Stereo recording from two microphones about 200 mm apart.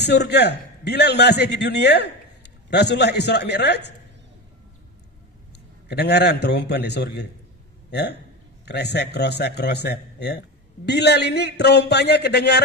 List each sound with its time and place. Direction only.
0.0 s a man's voice: 55° left (ahead or behind)
5.9 s a man's voice: 55° left (ahead or behind)